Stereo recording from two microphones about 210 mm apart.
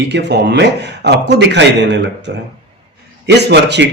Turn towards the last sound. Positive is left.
turn(degrees=-55)  # may be behind; listen again after turning